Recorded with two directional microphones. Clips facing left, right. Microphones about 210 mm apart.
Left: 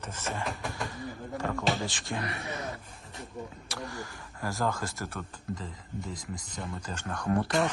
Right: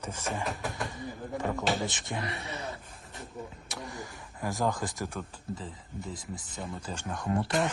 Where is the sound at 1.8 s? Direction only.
20° right (ahead or behind).